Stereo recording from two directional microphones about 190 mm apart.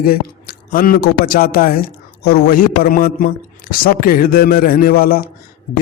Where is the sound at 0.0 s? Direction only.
50° left (ahead or behind).